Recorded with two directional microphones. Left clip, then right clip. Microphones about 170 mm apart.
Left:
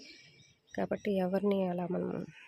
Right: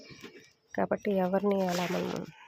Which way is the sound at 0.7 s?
10° left (ahead or behind).